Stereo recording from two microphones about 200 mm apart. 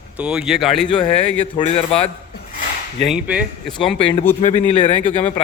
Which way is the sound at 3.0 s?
5° right (ahead or behind).